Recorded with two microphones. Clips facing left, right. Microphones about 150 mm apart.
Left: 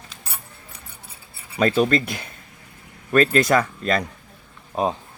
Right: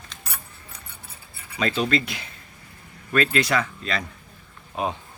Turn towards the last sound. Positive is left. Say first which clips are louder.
# left 5 dB
turn(degrees=35)  # may be behind; listen again after turning